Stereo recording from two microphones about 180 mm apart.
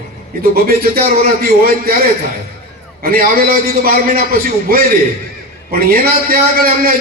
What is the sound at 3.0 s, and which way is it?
A man's voice, 55° right (ahead or behind).